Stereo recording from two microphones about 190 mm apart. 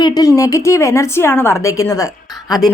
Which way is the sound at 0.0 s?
20° left (ahead or behind).